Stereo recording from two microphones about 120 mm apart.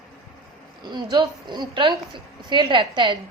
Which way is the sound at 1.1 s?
40° right (ahead or behind).